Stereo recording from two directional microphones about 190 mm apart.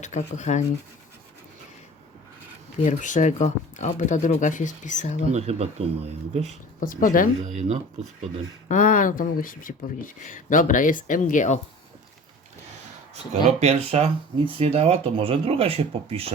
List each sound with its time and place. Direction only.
0.0 s speech: 40° left (ahead or behind)
2.8 s speech: 40° left (ahead or behind)
5.3 s speech: 35° right (ahead or behind)
6.7 s speech: 45° left (ahead or behind)
7.4 s speech: 35° right (ahead or behind)
8.7 s speech: 40° left (ahead or behind)
13.3 s speech: 35° right (ahead or behind)